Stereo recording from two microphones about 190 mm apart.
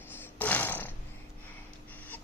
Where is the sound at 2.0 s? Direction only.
10° left (ahead or behind).